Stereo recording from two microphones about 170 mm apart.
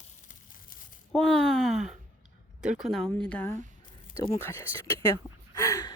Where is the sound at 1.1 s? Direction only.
5° left (ahead or behind).